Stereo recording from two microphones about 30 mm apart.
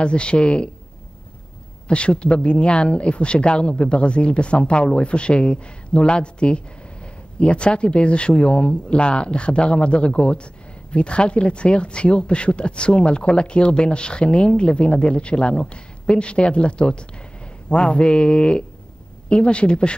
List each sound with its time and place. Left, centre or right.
0.0 s speech: left
1.9 s speech: left